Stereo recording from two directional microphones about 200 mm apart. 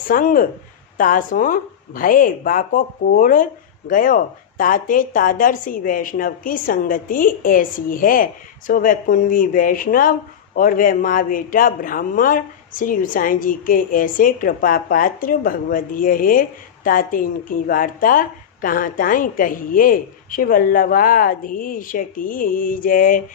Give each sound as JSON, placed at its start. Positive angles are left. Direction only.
{"t": 0.1, "sound": "speech", "side_deg": 45}